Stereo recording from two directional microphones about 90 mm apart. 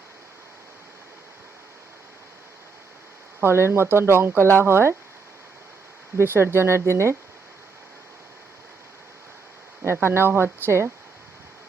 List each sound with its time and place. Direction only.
3.4 s speech: 30° right (ahead or behind)
6.1 s speech: 25° right (ahead or behind)
9.8 s speech: 30° right (ahead or behind)